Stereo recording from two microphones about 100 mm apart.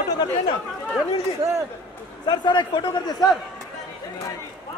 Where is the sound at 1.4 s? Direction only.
90° right.